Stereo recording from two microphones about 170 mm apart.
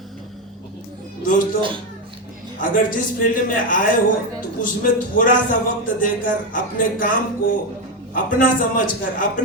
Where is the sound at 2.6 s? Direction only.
55° left (ahead or behind).